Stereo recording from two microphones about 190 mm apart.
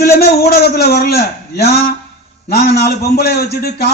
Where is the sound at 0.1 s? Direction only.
55° left (ahead or behind).